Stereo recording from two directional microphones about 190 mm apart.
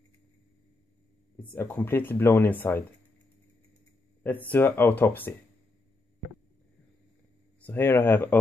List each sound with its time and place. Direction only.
1.4 s speech: 10° left (ahead or behind)
4.2 s speech: 10° left (ahead or behind)
7.6 s speech: 10° left (ahead or behind)